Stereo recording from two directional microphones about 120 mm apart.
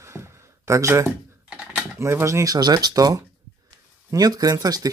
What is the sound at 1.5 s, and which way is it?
Typing, 5° right (ahead or behind).